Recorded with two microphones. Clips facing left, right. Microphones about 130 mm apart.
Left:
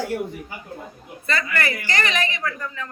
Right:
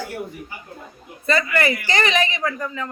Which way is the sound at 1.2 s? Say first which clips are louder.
Right 5 dB; 20° right (ahead or behind).